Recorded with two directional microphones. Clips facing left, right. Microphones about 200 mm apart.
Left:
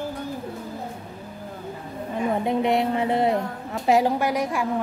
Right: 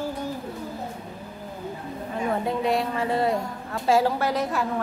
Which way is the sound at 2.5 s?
20° left (ahead or behind).